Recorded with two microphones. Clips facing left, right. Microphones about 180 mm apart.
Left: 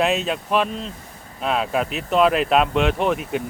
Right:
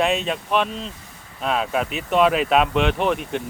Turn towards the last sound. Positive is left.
turn(degrees=0)  # may be behind; listen again after turning